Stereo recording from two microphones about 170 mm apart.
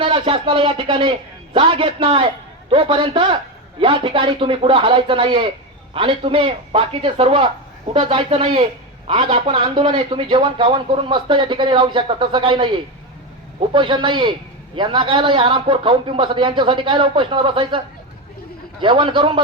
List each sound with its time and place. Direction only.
0.0 s a man's voice: 30° right (ahead or behind)